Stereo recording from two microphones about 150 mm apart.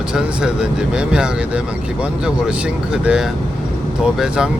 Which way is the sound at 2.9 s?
5° right (ahead or behind).